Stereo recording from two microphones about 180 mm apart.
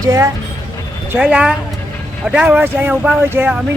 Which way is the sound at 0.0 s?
20° right (ahead or behind).